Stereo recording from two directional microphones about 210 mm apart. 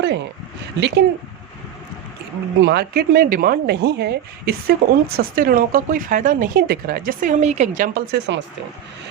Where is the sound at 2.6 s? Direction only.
50° right (ahead or behind).